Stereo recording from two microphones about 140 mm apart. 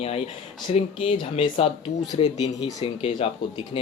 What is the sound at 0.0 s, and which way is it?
A man's voice, 45° left (ahead or behind).